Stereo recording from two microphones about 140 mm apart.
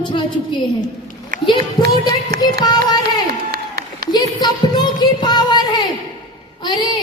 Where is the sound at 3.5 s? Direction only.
90° right.